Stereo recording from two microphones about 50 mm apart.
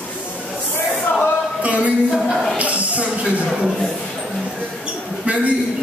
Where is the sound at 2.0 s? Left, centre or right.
Centre.